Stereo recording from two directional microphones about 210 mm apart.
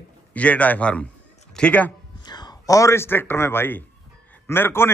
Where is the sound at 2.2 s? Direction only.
20° left (ahead or behind).